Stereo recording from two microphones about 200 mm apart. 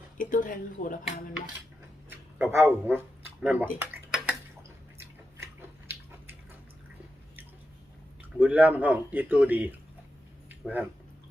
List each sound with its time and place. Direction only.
0.2 s speech: 40° left (ahead or behind)
2.0 s speech: 10° right (ahead or behind)
3.8 s dishes: 5° right (ahead or behind)
5.9 s a sound: 10° right (ahead or behind)
8.2 s speech: 5° right (ahead or behind)
10.5 s a sound: 10° right (ahead or behind)